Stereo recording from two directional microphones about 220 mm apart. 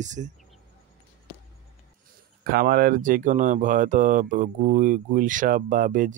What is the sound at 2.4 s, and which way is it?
Speech, 40° right (ahead or behind).